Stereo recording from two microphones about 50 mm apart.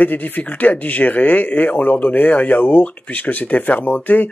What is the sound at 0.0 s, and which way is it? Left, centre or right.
Speech, left.